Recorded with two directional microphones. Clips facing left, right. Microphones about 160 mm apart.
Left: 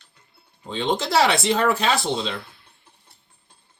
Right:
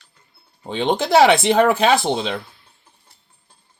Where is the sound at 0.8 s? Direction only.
60° right (ahead or behind).